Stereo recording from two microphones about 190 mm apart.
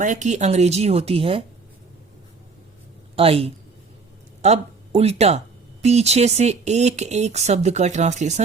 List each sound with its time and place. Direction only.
0.0 s speech: 40° right (ahead or behind)
3.2 s speech: 30° right (ahead or behind)